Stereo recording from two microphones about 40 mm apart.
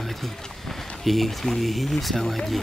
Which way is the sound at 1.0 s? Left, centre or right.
Centre.